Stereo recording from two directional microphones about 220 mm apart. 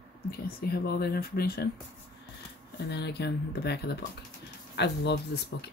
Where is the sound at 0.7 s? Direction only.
45° left (ahead or behind).